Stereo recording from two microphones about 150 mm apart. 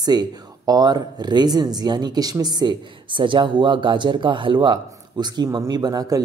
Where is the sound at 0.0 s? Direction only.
25° right (ahead or behind).